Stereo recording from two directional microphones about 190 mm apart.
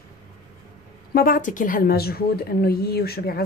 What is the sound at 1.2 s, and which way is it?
Speech, 50° left (ahead or behind).